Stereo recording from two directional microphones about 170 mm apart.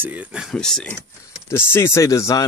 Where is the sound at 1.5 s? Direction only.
15° left (ahead or behind).